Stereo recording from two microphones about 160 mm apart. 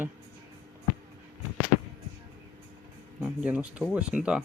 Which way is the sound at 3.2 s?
5° right (ahead or behind).